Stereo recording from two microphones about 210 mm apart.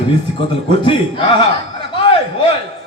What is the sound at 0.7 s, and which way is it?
Speech, 25° left (ahead or behind).